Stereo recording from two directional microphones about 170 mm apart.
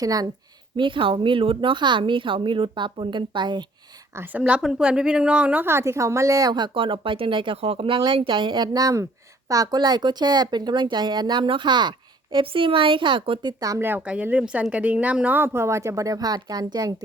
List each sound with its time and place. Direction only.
0.0 s a woman's voice: 20° right (ahead or behind)
4.1 s a woman's voice: 10° right (ahead or behind)